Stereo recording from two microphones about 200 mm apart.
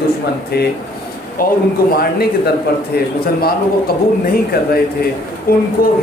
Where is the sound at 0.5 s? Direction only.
50° left (ahead or behind).